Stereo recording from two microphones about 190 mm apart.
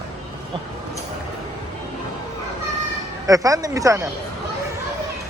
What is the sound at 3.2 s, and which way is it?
Speech, 20° right (ahead or behind).